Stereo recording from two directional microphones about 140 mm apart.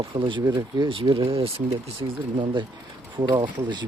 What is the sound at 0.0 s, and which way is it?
Speech, 40° right (ahead or behind).